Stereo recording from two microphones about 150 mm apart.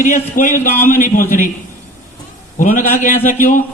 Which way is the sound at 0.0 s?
60° left (ahead or behind).